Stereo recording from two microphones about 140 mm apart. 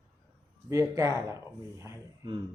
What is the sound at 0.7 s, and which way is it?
Speech, 25° right (ahead or behind).